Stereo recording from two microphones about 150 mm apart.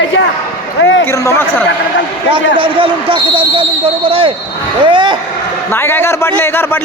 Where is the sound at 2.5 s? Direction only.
35° right (ahead or behind).